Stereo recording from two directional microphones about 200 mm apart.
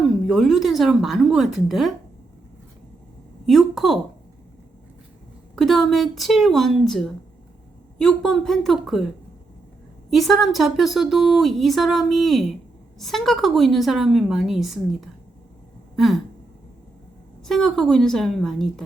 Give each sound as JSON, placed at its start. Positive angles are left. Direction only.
{"t": 0.0, "sound": "speech", "side_deg": 0}
{"t": 3.4, "sound": "a woman's voice", "side_deg": 0}
{"t": 5.5, "sound": "speech", "side_deg": 0}
{"t": 10.1, "sound": "speech", "side_deg": 0}
{"t": 16.0, "sound": "a sound", "side_deg": 0}
{"t": 17.4, "sound": "speech", "side_deg": 0}